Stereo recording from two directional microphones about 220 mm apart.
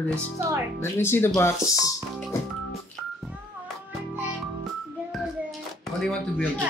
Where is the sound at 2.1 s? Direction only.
Centre (ahead or behind).